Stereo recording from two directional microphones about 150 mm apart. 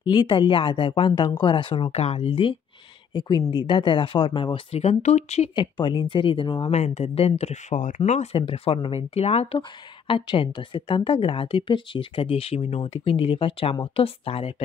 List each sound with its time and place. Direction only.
0.1 s speech: 35° left (ahead or behind); by 5.5 s 50° left (ahead or behind)
5.6 s speech: 30° left (ahead or behind)
6.7 s speech: 45° left (ahead or behind)